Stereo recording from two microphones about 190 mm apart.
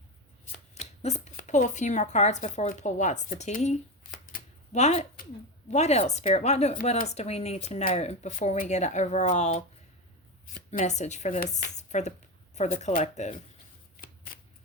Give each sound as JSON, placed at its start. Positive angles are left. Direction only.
{"t": 0.8, "sound": "speech", "side_deg": 35}
{"t": 4.3, "sound": "a sound", "side_deg": 40}
{"t": 5.7, "sound": "speech", "side_deg": 35}